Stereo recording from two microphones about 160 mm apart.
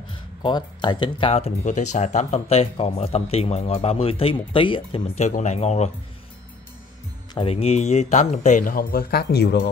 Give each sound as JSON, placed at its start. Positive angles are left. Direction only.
{"t": 0.4, "sound": "speech", "side_deg": 30}
{"t": 7.3, "sound": "speech", "side_deg": 35}